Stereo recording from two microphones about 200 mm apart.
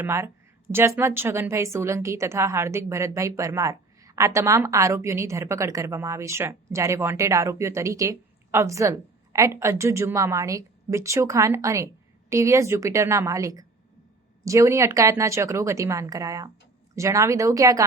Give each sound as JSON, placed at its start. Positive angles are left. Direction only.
{"t": 0.0, "sound": "a woman's voice", "side_deg": -15}